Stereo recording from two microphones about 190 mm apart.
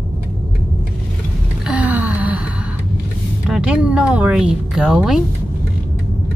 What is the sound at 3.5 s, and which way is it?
Speech, 5° right (ahead or behind).